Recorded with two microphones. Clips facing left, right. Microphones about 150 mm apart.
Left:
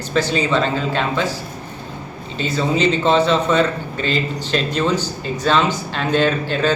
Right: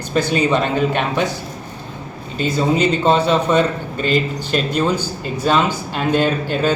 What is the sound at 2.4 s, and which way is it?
Speech, 10° right (ahead or behind).